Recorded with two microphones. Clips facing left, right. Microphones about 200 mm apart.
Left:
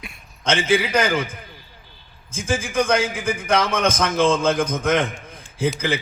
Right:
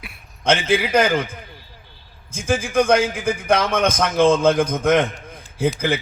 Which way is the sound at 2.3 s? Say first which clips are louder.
Right 3 dB; 60° right (ahead or behind).